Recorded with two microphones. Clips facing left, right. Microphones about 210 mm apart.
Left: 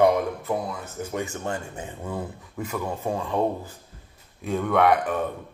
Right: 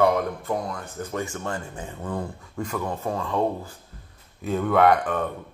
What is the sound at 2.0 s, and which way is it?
Speech, 5° left (ahead or behind).